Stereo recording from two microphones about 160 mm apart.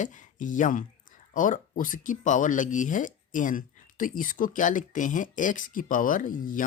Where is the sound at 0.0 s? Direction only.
50° left (ahead or behind).